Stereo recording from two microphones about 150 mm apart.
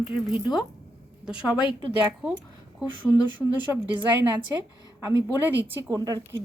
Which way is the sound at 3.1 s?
25° left (ahead or behind).